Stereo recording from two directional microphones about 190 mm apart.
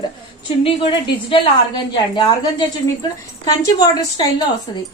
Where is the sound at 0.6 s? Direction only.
30° left (ahead or behind).